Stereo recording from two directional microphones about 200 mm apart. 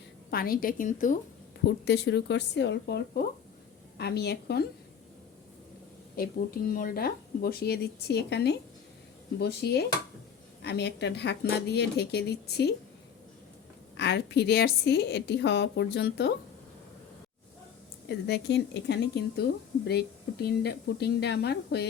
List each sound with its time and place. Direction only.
0.3 s speech: 50° left (ahead or behind)
1.8 s a woman's voice: 60° left (ahead or behind)
6.7 s a woman's voice: 45° left (ahead or behind)
13.9 s a woman's voice: 60° left (ahead or behind)
18.1 s a woman's voice: 55° left (ahead or behind)